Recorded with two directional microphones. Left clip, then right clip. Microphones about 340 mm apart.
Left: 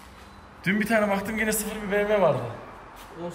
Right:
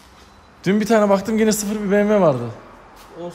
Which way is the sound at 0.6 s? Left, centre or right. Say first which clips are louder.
Right 7 dB; centre.